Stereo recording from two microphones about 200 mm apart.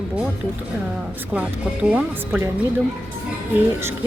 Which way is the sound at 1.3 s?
5° right (ahead or behind).